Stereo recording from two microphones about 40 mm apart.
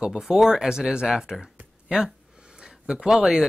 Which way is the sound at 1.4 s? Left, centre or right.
Centre.